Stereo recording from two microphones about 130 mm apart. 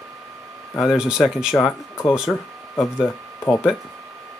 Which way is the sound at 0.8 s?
5° right (ahead or behind).